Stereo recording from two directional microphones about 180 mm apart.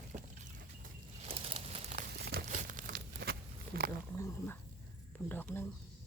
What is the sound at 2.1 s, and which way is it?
Crumpling, 65° right (ahead or behind).